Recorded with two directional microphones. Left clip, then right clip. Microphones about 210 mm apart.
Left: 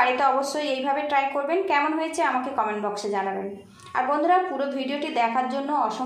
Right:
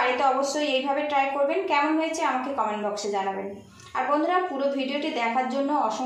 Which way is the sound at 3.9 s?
30° left (ahead or behind).